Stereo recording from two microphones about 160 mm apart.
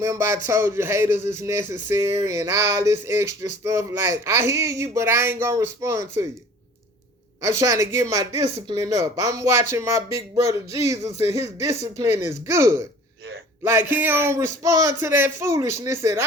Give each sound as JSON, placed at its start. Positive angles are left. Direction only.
{"t": 0.0, "sound": "speech", "side_deg": -15}
{"t": 7.6, "sound": "speech", "side_deg": -20}